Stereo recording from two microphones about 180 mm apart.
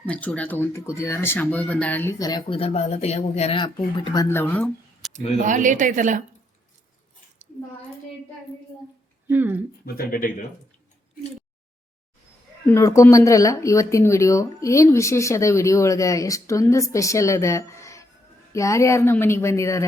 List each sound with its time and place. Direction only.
0.0 s speech: 10° left (ahead or behind)
5.5 s a woman's voice: 45° right (ahead or behind)
9.2 s speech: 10° right (ahead or behind)
9.8 s speech: 55° left (ahead or behind)
12.6 s speech: 15° left (ahead or behind)